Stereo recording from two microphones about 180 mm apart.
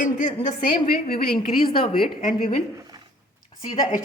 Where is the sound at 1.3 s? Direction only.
30° left (ahead or behind).